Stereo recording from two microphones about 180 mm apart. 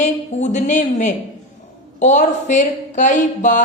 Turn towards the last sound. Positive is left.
turn(degrees=45)  # may be behind; listen again after turning